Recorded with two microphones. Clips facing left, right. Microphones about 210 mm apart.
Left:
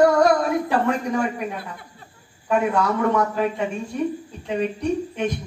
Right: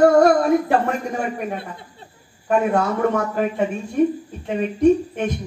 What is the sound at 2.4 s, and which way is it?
Speech, 50° right (ahead or behind).